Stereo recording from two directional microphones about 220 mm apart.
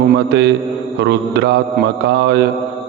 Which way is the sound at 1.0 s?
50° right (ahead or behind).